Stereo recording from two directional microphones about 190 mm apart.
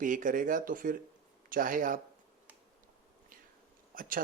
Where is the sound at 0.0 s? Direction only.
45° right (ahead or behind).